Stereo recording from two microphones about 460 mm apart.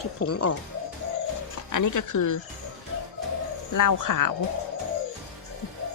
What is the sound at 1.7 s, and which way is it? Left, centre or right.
Speech, left.